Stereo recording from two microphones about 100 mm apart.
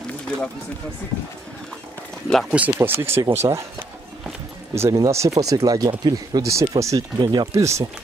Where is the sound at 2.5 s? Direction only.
20° right (ahead or behind).